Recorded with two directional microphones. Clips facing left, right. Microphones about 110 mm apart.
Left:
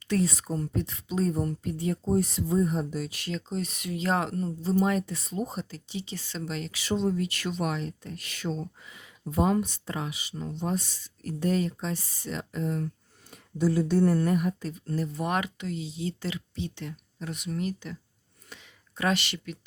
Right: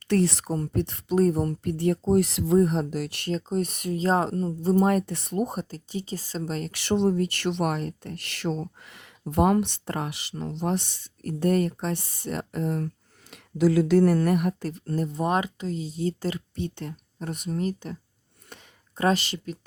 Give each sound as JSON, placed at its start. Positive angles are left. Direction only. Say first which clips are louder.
{"t": 0.1, "sound": "speech", "louder": "right 4 dB", "side_deg": -70}
{"t": 1.7, "sound": "speech", "louder": "right 5 dB", "side_deg": -65}
{"t": 3.3, "sound": "speech", "louder": "right 7 dB", "side_deg": -50}
{"t": 4.6, "sound": "speech", "louder": "right 4 dB", "side_deg": -50}
{"t": 5.7, "sound": "speech", "louder": "right 4 dB", "side_deg": -45}
{"t": 6.8, "sound": "speech", "louder": "right 4 dB", "side_deg": -65}
{"t": 13.3, "sound": "speech", "louder": "right 5 dB", "side_deg": -90}
{"t": 15.1, "sound": "speech", "louder": "right 6 dB", "side_deg": -30}
{"t": 18.4, "sound": "a sound", "louder": "right 2 dB", "side_deg": -50}
{"t": 18.9, "sound": "speech", "louder": "right 4 dB", "side_deg": -35}